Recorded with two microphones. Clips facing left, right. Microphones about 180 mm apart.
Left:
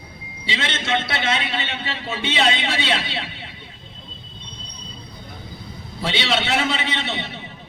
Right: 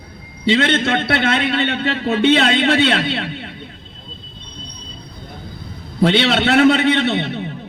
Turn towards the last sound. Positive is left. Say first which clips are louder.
# right 10 dB
turn(degrees=-55)  # may be behind; listen again after turning